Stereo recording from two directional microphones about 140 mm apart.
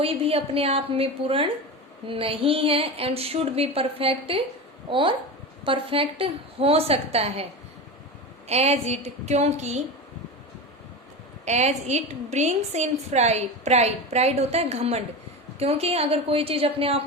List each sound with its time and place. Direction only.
0.0 s a woman's voice: 45° right (ahead or behind)
8.4 s a woman's voice: 50° right (ahead or behind)
11.4 s a woman's voice: 55° right (ahead or behind)